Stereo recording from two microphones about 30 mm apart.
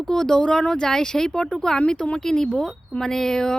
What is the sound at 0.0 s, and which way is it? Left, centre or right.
Speech, centre.